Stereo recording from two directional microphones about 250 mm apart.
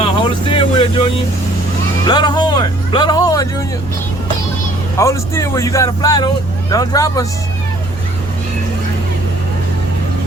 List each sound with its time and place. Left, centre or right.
0.0 s speech: left
2.0 s speech: centre
4.9 s speech: centre